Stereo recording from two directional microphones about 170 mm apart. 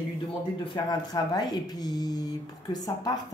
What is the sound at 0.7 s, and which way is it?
A woman's voice, 25° left (ahead or behind).